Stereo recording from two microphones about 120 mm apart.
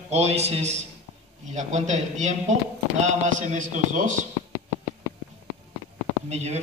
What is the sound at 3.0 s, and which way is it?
Speech, 90° right.